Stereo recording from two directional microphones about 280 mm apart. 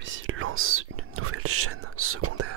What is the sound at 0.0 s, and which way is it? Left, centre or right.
Whispering, right.